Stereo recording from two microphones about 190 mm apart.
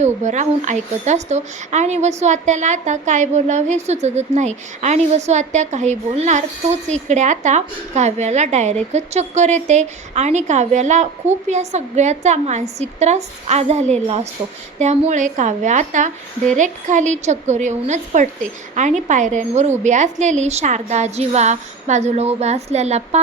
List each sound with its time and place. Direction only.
0.0 s a woman's voice: 40° right (ahead or behind)